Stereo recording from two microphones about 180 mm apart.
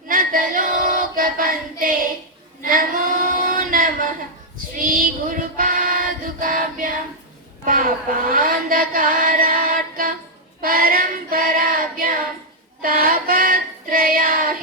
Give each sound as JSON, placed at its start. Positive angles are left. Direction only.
{"t": 0.1, "sound": "child singing", "side_deg": -50}
{"t": 7.6, "sound": "a sound", "side_deg": -50}
{"t": 10.6, "sound": "child singing", "side_deg": -55}